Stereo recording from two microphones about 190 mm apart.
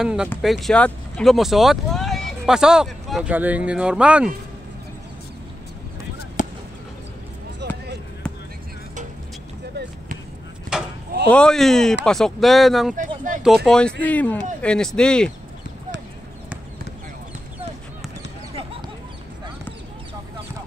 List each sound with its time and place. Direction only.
0.0 s speech: 5° right (ahead or behind)
6.4 s fireworks: 40° left (ahead or behind)
7.6 s basketball bounce: 60° right (ahead or behind)
10.7 s a sound: 5° right (ahead or behind)
11.2 s a man's voice: 5° left (ahead or behind)
18.5 s a sound: 30° right (ahead or behind)